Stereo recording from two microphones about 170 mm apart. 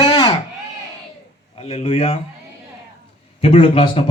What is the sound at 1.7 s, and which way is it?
Speech, 35° left (ahead or behind).